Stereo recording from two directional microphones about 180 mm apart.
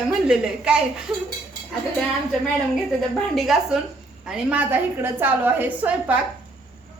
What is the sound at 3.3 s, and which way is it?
A woman's voice, centre (ahead or behind).